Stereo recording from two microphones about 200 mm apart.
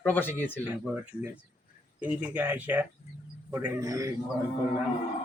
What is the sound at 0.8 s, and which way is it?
A man's voice, 5° right (ahead or behind).